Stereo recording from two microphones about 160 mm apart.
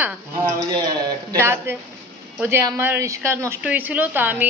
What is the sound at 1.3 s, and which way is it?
A man's voice, 15° right (ahead or behind).